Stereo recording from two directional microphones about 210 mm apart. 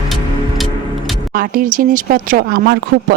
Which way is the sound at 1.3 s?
45° right (ahead or behind).